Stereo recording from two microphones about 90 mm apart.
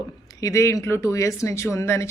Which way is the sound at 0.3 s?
35° left (ahead or behind).